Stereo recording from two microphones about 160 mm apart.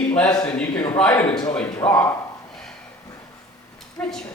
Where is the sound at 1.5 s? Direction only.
10° left (ahead or behind).